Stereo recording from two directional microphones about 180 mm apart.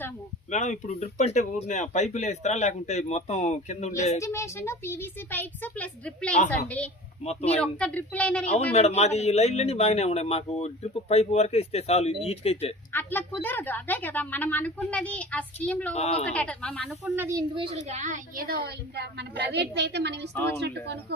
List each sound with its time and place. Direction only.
0.5 s speech: 40° left (ahead or behind)
4.2 s a woman's voice: 15° left (ahead or behind)
7.3 s speech: 35° left (ahead or behind)
7.8 s a woman's voice: 10° left (ahead or behind)
9.0 s speech: 35° left (ahead or behind)
12.9 s a woman's voice: 10° left (ahead or behind)
16.0 s speech: 35° left (ahead or behind)
16.2 s a woman's voice: 5° left (ahead or behind)
17.1 s speech: 15° right (ahead or behind)
17.5 s a child's voice: 30° right (ahead or behind)
17.8 s a woman's voice: 40° right (ahead or behind); by 21.0 s 70° right (ahead or behind)